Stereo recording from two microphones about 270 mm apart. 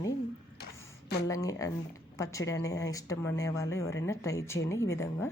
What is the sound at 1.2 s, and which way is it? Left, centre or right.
A woman's voice, centre.